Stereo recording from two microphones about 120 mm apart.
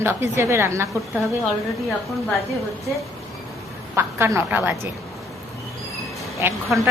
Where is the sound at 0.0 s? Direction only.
20° right (ahead or behind).